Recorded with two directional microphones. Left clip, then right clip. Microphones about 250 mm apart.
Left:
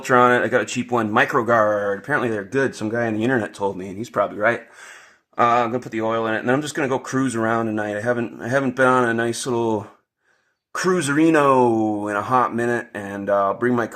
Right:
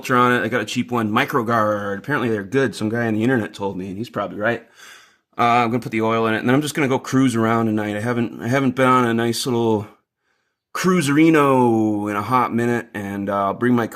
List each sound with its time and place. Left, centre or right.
0.0 s speech: right
5.4 s speech: right
10.7 s speech: right